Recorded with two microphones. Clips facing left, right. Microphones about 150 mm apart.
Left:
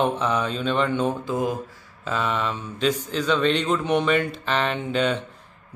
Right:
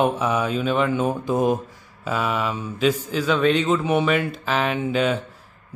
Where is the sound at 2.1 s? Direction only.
10° right (ahead or behind).